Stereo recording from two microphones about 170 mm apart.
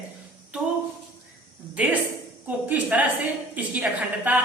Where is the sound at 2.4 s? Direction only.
10° right (ahead or behind).